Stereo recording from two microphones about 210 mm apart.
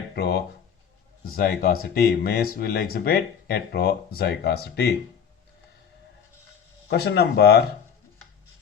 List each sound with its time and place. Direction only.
0.1 s speech: 50° left (ahead or behind)
6.8 s speech: 50° left (ahead or behind)